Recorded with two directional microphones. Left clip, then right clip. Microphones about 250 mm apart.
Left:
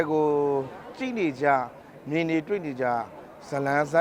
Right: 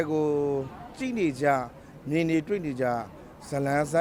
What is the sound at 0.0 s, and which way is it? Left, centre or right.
A man's voice, centre.